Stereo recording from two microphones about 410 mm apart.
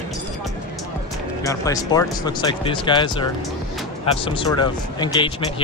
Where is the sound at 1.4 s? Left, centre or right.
Centre.